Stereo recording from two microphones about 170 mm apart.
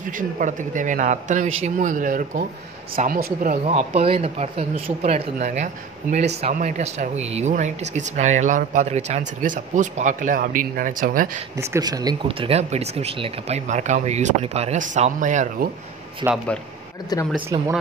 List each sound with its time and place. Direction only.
0.0 s speech: 50° right (ahead or behind)
3.6 s speech: 35° right (ahead or behind); by 11.3 s 55° right (ahead or behind)
11.5 s speech: 20° right (ahead or behind); by 15.7 s 45° right (ahead or behind)
16.2 s speech: 20° right (ahead or behind)
17.1 s speech: 20° left (ahead or behind)
17.5 s speech: 25° right (ahead or behind)